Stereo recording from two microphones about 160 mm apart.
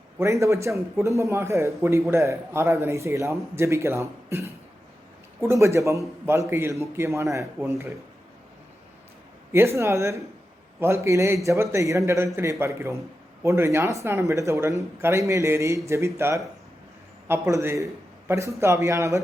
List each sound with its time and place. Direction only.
0.2 s a man's voice: 20° right (ahead or behind)
9.5 s a man's voice: 15° right (ahead or behind)